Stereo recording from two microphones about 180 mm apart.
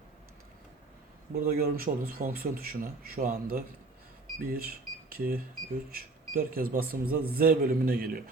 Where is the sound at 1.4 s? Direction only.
55° right (ahead or behind).